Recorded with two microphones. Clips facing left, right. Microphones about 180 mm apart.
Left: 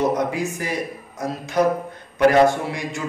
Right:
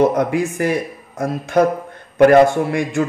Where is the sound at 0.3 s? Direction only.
55° right (ahead or behind).